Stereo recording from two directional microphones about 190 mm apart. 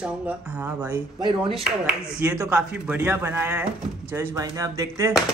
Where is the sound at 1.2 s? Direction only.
25° right (ahead or behind).